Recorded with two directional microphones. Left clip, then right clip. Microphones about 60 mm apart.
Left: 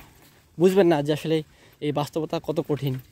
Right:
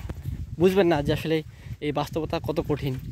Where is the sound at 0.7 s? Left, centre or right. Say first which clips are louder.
Left 3 dB; left.